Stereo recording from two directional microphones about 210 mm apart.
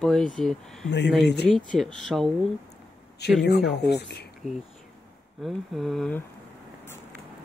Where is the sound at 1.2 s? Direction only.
55° left (ahead or behind).